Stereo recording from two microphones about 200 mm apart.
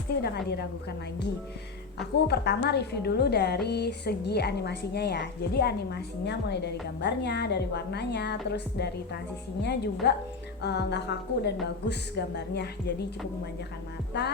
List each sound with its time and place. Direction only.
0.1 s a woman's voice: 55° left (ahead or behind)